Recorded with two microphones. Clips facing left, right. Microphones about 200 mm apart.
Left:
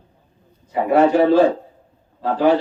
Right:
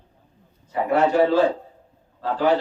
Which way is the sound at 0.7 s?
15° left (ahead or behind).